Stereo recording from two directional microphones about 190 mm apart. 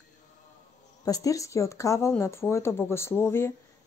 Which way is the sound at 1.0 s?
20° left (ahead or behind).